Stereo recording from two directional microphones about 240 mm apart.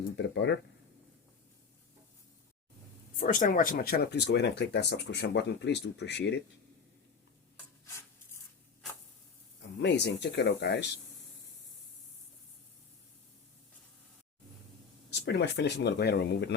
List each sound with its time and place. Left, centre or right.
0.2 s speech: left
3.2 s speech: left
9.8 s speech: left
15.2 s speech: left